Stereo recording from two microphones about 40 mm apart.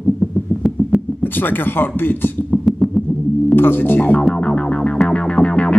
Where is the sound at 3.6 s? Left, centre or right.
Left.